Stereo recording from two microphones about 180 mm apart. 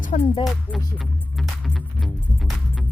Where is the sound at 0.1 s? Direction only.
40° left (ahead or behind).